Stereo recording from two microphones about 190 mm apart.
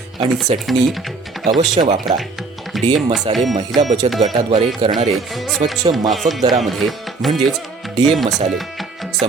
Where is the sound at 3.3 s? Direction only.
30° right (ahead or behind).